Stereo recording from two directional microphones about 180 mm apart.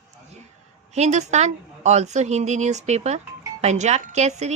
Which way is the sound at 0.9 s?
40° right (ahead or behind).